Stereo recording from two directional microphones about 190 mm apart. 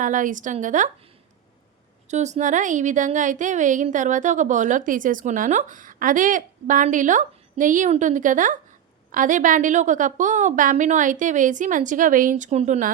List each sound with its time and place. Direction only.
0.0 s a woman's voice: 45° right (ahead or behind)
2.0 s a woman's voice: 40° right (ahead or behind)